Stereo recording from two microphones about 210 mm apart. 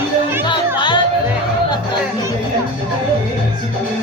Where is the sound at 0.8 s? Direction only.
20° left (ahead or behind).